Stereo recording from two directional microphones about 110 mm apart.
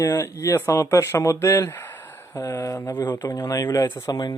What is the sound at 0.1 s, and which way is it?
Speech, 25° left (ahead or behind).